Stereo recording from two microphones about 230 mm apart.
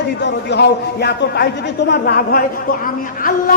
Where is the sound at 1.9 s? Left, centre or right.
Left.